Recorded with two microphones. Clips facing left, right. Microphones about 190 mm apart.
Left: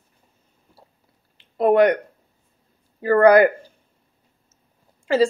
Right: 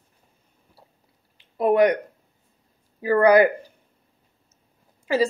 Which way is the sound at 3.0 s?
10° right (ahead or behind).